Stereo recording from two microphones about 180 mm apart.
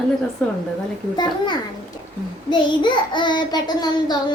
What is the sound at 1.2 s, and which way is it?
Child singing, 25° left (ahead or behind).